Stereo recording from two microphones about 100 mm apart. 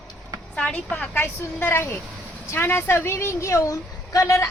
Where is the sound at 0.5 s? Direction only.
10° left (ahead or behind); by 4.4 s 30° left (ahead or behind).